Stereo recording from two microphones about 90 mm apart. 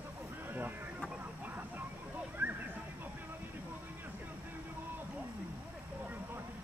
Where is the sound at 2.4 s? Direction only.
25° right (ahead or behind).